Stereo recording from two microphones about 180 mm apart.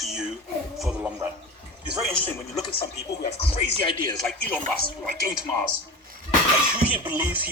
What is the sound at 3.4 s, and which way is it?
Speech, 30° left (ahead or behind).